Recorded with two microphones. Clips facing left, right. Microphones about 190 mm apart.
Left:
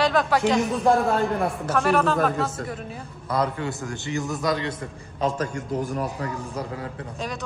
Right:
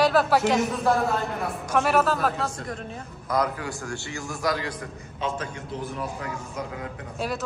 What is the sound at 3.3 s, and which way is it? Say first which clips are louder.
A man's voice: left 1 dB; 25° left (ahead or behind).